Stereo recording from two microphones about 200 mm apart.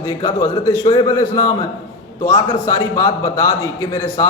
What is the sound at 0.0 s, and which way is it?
A man's voice, 15° left (ahead or behind).